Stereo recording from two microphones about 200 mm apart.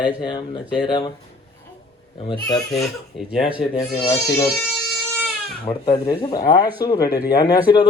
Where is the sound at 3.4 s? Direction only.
25° left (ahead or behind).